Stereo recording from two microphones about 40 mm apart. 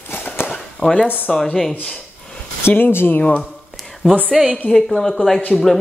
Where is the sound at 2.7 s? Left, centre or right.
Left.